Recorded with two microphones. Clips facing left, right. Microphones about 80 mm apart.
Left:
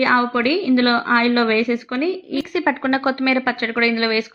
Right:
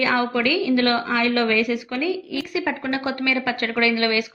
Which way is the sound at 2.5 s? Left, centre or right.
Left.